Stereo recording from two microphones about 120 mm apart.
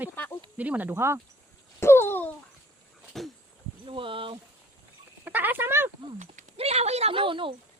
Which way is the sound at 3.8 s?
45° right (ahead or behind).